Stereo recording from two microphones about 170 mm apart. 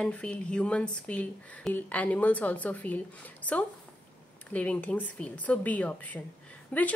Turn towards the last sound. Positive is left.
turn(degrees=10)  # may be behind; listen again after turning